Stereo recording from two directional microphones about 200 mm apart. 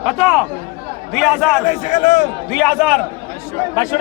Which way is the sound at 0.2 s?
Centre (ahead or behind).